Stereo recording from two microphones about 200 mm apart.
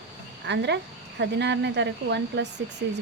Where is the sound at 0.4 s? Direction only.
60° right (ahead or behind).